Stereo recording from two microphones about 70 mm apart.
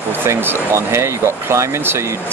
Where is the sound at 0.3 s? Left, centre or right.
Right.